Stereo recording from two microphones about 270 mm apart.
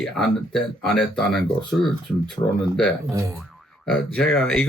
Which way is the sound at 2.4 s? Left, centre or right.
Centre.